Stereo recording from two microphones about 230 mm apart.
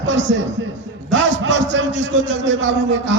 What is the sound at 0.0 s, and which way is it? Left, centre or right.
A man's voice, right.